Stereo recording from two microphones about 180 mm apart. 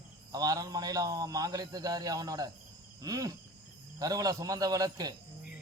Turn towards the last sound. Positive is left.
turn(degrees=-20)  # may be behind; listen again after turning